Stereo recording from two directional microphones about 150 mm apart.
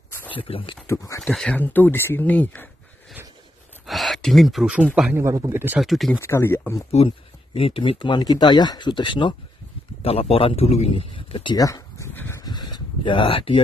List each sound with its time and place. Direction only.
0.3 s speech: 35° left (ahead or behind)
0.8 s speech: 20° left (ahead or behind)
1.2 s speech: 5° left (ahead or behind)
3.8 s a sound: centre (ahead or behind)
5.1 s speech: 20° right (ahead or behind)
5.8 s speech: centre (ahead or behind)
6.1 s speech: 15° left (ahead or behind)
6.9 s speech: 45° left (ahead or behind)